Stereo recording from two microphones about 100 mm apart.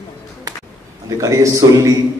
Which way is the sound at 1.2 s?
30° right (ahead or behind).